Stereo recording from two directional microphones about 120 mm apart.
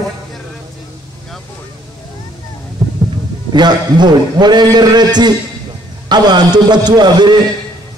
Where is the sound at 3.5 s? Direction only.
35° right (ahead or behind).